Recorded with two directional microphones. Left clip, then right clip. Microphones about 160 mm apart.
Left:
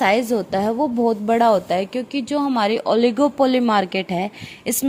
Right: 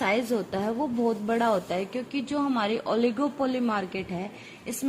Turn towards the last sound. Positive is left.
turn(degrees=55)  # may be behind; listen again after turning